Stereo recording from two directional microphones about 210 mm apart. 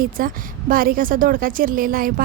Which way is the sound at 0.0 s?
40° right (ahead or behind).